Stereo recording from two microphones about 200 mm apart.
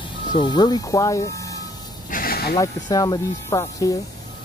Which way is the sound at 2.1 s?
45° left (ahead or behind).